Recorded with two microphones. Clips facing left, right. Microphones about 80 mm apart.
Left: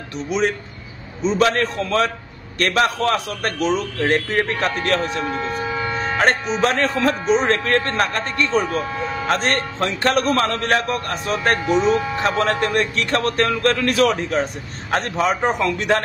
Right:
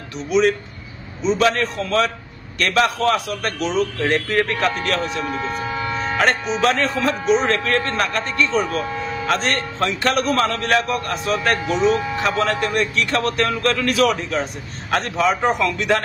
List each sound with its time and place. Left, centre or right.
1.2 s speech: left
2.6 s speech: left
4.0 s speech: left
5.3 s speech: centre
6.6 s speech: left